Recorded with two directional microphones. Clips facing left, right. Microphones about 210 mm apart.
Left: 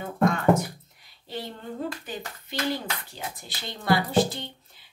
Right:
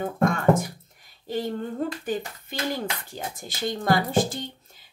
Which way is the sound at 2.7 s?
45° right (ahead or behind).